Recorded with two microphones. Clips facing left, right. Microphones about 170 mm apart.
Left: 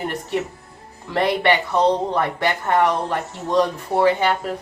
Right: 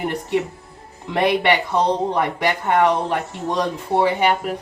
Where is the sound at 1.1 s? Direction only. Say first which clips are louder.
Right 1 dB; 20° right (ahead or behind).